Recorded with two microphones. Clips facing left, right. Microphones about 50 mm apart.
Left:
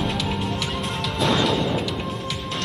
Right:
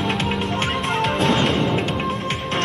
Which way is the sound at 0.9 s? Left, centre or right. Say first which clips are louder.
Right 3 dB; right.